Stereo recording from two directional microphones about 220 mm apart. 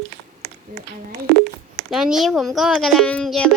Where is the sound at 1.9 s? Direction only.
Centre (ahead or behind).